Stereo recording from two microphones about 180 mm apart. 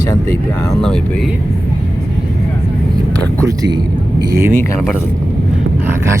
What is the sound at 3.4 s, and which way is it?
Speech, 20° right (ahead or behind).